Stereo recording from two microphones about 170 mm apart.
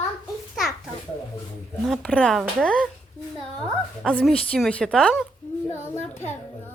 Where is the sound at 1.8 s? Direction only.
5° left (ahead or behind).